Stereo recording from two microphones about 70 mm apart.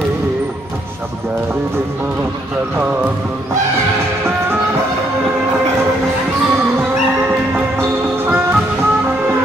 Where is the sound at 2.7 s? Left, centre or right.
Right.